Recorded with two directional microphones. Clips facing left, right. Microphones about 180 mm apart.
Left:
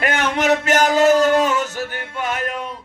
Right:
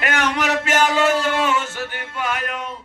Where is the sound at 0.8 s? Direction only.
40° left (ahead or behind).